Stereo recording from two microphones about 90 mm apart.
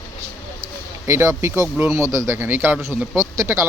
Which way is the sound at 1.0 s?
35° right (ahead or behind).